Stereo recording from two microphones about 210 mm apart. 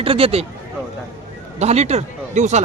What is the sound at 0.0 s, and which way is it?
Speech, 25° right (ahead or behind).